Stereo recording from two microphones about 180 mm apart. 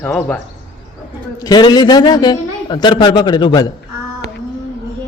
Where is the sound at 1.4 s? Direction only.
20° left (ahead or behind).